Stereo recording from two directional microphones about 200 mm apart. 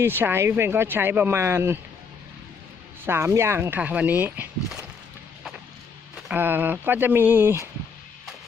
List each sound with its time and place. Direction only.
0.0 s speech: 10° right (ahead or behind)
3.1 s speech: 15° right (ahead or behind)
6.1 s speech: 5° right (ahead or behind)